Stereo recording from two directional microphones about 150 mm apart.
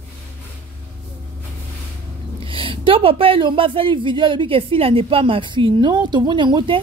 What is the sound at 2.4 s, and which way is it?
A woman's voice, 35° right (ahead or behind).